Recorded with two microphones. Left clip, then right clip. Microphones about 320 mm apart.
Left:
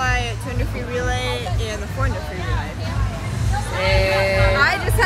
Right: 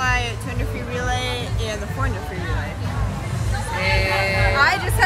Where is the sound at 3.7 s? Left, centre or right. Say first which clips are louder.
Left 2 dB; centre.